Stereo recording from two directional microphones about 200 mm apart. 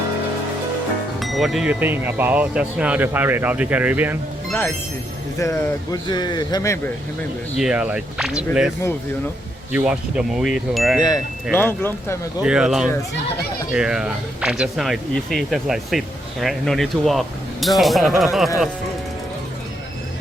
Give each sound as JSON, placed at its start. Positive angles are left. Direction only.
{"t": 1.2, "sound": "speech", "side_deg": 0}
{"t": 5.4, "sound": "a man's voice", "side_deg": 15}
{"t": 7.6, "sound": "speech", "side_deg": -5}
{"t": 9.7, "sound": "speech", "side_deg": -5}
{"t": 11.5, "sound": "speech", "side_deg": 10}
{"t": 12.4, "sound": "speech", "side_deg": -5}